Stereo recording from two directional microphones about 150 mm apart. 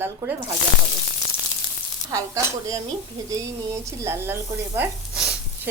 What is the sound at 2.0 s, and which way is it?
Speech, 20° right (ahead or behind).